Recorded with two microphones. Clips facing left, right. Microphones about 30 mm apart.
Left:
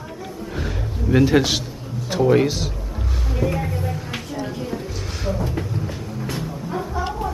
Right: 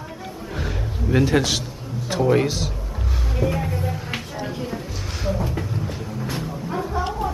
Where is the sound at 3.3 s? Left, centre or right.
Centre.